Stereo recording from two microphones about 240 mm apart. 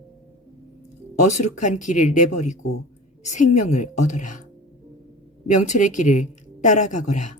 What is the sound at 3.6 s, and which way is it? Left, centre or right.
Speech, left.